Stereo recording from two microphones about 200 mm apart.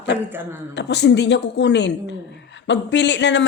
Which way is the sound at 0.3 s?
10° right (ahead or behind).